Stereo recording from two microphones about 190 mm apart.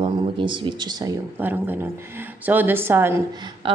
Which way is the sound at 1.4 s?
10° right (ahead or behind).